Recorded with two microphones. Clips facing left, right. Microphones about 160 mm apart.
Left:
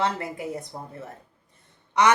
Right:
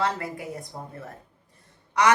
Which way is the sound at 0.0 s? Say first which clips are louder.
Left 1 dB; 25° left (ahead or behind).